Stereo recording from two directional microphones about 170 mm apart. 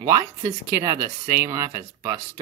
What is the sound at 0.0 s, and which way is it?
Speech, 15° right (ahead or behind).